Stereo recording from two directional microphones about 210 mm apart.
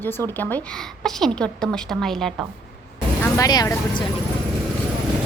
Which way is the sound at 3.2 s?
15° left (ahead or behind).